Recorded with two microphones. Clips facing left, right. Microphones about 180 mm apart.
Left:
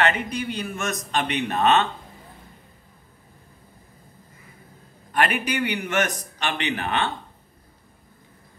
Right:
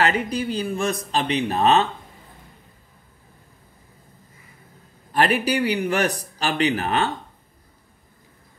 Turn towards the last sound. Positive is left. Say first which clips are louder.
# right 4 dB
turn(degrees=-40)  # may be behind; listen again after turning